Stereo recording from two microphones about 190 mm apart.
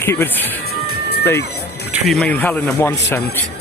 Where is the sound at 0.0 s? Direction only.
10° left (ahead or behind).